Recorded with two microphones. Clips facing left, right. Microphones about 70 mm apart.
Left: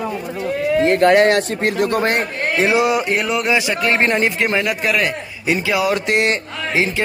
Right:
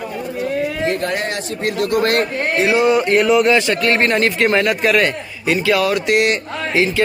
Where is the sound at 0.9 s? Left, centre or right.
Left.